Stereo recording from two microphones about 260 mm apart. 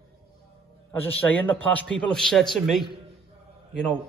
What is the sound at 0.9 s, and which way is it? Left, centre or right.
A man's voice, centre.